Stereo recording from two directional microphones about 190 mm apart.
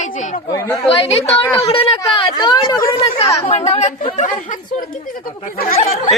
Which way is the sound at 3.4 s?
35° left (ahead or behind).